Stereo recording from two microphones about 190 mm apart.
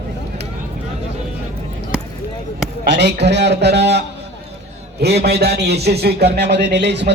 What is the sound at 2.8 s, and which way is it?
A man's voice, 65° right (ahead or behind).